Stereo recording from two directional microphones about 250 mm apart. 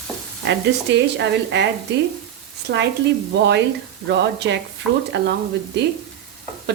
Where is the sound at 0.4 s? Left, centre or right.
Right.